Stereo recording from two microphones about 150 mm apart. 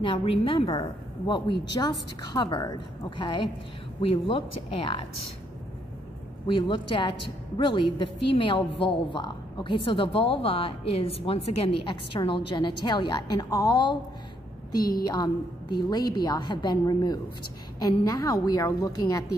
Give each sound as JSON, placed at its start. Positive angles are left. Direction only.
{"t": 0.0, "sound": "a woman's voice", "side_deg": 40}
{"t": 3.2, "sound": "a woman's voice", "side_deg": 35}
{"t": 6.4, "sound": "a woman's voice", "side_deg": 30}